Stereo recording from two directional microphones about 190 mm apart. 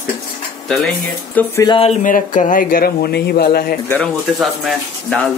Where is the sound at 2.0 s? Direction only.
40° left (ahead or behind).